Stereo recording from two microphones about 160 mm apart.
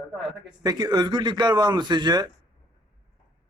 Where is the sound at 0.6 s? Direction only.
25° right (ahead or behind).